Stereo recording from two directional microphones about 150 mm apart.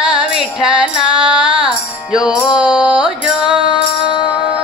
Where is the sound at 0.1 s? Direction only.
5° right (ahead or behind).